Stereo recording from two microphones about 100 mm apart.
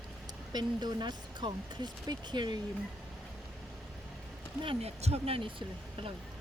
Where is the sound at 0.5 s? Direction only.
45° right (ahead or behind).